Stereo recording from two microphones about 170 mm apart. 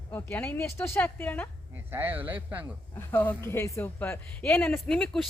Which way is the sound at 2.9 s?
10° left (ahead or behind).